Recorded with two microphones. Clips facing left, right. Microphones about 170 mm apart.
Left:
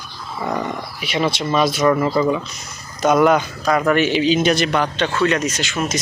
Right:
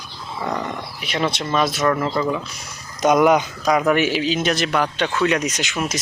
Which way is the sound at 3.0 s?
15° right (ahead or behind).